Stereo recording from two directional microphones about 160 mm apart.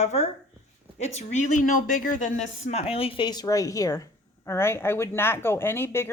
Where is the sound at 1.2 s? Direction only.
55° left (ahead or behind).